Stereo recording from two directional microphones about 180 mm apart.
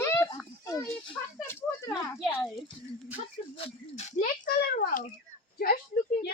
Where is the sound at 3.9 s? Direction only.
40° left (ahead or behind).